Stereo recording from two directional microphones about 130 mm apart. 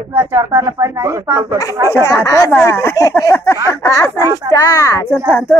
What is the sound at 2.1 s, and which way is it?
Speech, 25° left (ahead or behind).